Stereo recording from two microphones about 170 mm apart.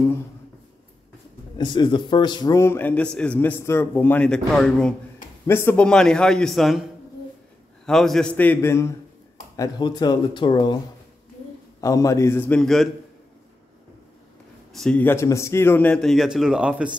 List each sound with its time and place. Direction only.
1.6 s a man's voice: 25° left (ahead or behind)
11.8 s a man's voice: 20° left (ahead or behind); by 12.9 s centre (ahead or behind)
14.7 s a man's voice: 5° left (ahead or behind)